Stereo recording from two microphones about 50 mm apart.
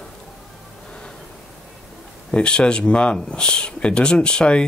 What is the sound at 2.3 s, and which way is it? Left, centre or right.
Speech, left.